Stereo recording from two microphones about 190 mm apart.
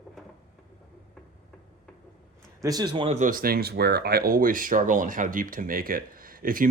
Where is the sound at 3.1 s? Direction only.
45° right (ahead or behind).